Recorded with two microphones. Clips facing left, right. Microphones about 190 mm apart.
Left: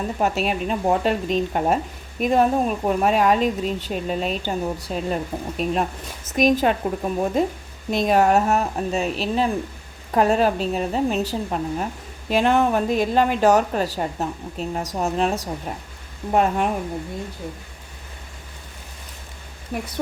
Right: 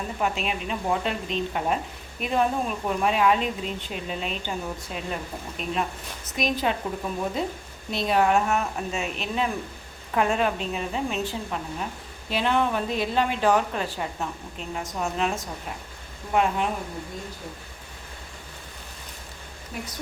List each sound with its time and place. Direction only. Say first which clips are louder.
0.2 s a woman's voice: left 5 dB; 40° left (ahead or behind)